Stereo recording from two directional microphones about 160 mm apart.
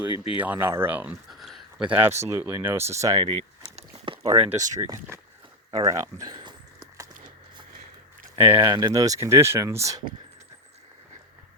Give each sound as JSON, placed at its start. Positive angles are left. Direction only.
{"t": 0.3, "sound": "speech", "side_deg": -10}
{"t": 3.2, "sound": "speech", "side_deg": -35}
{"t": 3.8, "sound": "a sound", "side_deg": -35}
{"t": 5.7, "sound": "speech", "side_deg": -20}
{"t": 8.4, "sound": "speech", "side_deg": -10}
{"t": 8.7, "sound": "speech", "side_deg": -25}